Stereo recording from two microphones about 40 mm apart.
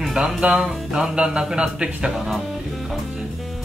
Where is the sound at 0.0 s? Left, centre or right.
Centre.